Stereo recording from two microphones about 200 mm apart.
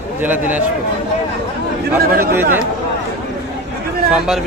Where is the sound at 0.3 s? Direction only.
10° right (ahead or behind).